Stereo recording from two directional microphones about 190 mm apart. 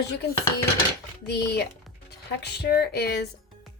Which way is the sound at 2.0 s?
60° left (ahead or behind).